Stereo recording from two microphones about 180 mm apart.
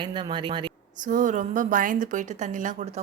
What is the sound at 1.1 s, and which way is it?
A woman's voice, 45° right (ahead or behind).